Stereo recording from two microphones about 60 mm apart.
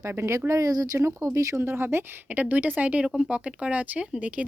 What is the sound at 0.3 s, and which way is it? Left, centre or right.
Speech, right.